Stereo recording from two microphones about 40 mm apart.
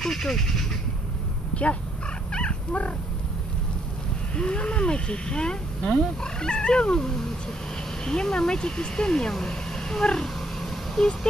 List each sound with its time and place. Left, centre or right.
0.0 s speech: centre
1.5 s dog: left
4.4 s speech: left
11.0 s speech: centre